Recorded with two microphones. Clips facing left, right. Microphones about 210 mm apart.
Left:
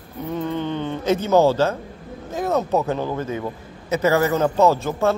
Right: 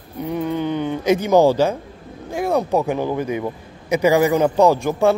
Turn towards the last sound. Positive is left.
turn(degrees=-15)  # may be behind; listen again after turning